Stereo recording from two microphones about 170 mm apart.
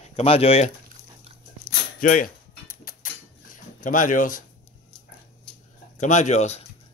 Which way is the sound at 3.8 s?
50° left (ahead or behind).